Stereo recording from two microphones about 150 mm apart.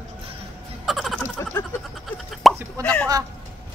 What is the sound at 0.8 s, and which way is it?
Music, centre (ahead or behind).